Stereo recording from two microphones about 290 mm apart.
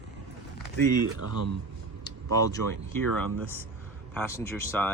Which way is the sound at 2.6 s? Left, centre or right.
Right.